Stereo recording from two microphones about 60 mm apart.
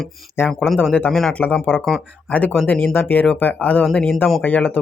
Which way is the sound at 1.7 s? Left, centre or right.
Left.